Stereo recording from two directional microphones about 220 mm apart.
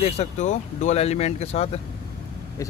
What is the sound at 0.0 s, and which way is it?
Speech, 30° left (ahead or behind).